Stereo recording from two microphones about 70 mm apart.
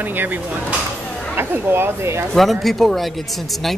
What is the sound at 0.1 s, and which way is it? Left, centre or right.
Speech, right.